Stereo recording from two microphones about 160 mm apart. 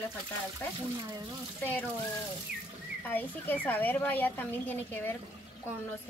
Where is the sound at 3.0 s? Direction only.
10° left (ahead or behind).